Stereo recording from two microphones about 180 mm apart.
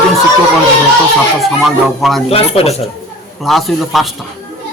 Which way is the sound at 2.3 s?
35° left (ahead or behind).